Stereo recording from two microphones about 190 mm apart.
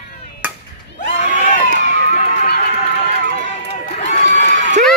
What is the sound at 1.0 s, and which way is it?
Crowd, 40° left (ahead or behind).